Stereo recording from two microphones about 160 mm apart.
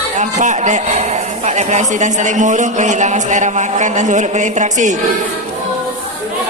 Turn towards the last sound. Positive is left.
turn(degrees=-50)  # may be behind; listen again after turning